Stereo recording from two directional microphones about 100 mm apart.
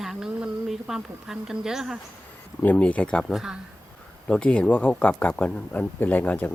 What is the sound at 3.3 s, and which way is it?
Speech, 5° right (ahead or behind).